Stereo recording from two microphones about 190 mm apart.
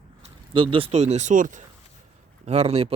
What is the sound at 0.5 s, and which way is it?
Speech, 25° right (ahead or behind).